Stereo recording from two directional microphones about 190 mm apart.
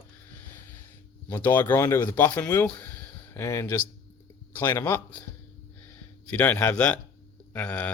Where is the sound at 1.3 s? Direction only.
10° left (ahead or behind).